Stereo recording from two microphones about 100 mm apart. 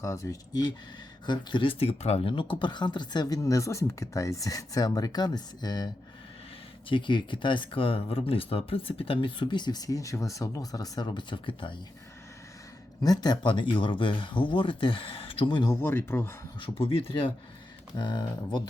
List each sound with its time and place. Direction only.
0.0 s speech: 35° left (ahead or behind)
1.3 s speech: 50° left (ahead or behind)
6.8 s speech: 55° left (ahead or behind)
13.0 s speech: 40° left (ahead or behind)
15.7 s speech: 25° left (ahead or behind)
16.8 s speech: 70° left (ahead or behind)
17.9 s speech: 50° left (ahead or behind)